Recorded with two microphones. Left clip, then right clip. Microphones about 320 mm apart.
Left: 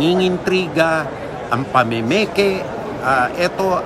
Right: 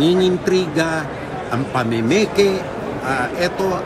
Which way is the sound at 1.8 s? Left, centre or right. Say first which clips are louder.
Even; centre.